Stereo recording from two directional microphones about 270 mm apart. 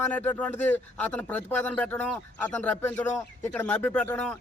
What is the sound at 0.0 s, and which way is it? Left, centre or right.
Speech, centre.